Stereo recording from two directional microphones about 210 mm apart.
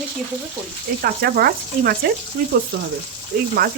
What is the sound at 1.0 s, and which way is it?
Speech, 45° right (ahead or behind).